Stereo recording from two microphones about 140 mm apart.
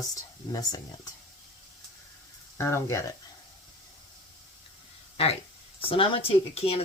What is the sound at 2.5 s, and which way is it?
Speech, 20° left (ahead or behind).